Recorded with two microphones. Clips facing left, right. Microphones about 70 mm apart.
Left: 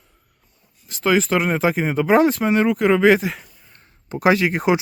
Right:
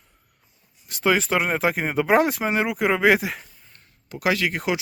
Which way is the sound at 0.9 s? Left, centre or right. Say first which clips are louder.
Left 3 dB; centre.